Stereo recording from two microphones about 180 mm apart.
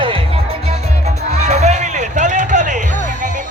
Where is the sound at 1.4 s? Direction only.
40° right (ahead or behind).